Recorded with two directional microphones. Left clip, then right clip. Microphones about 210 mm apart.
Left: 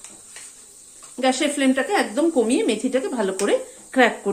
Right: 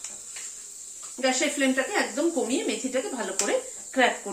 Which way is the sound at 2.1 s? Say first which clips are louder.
Left 7 dB; 55° left (ahead or behind).